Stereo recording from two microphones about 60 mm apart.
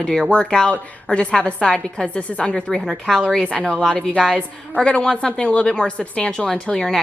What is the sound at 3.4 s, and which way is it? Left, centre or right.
A woman's voice, centre.